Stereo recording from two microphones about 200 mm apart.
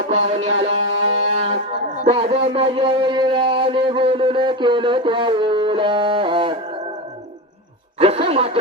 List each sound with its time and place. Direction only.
0.3 s music: 35° right (ahead or behind)
2.0 s a sound: 30° right (ahead or behind)
7.9 s chuckle: 30° right (ahead or behind)